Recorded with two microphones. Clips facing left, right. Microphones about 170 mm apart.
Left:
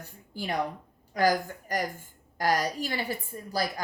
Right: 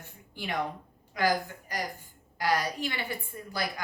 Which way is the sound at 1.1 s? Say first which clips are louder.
Left 3 dB; 45° left (ahead or behind).